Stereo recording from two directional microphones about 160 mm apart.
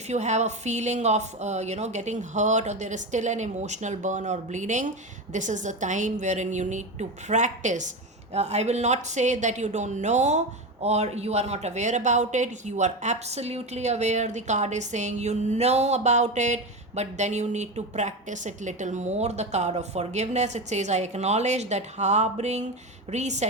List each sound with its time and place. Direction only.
0.1 s speech: 45° right (ahead or behind)